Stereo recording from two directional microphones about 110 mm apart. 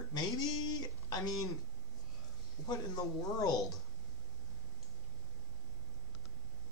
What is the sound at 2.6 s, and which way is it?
Speech, 35° left (ahead or behind).